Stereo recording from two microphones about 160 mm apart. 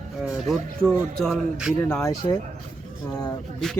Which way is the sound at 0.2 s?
Centre (ahead or behind).